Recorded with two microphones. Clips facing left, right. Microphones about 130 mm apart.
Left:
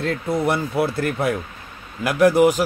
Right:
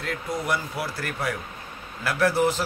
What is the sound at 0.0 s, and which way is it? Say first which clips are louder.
Speech: left 8 dB; 25° left (ahead or behind).